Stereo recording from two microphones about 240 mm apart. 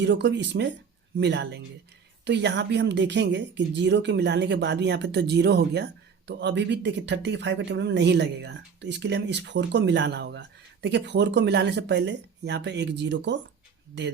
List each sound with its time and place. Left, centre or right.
0.0 s speech: right